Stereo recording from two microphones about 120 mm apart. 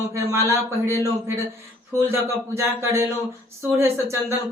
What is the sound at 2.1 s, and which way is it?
Speech, 20° right (ahead or behind).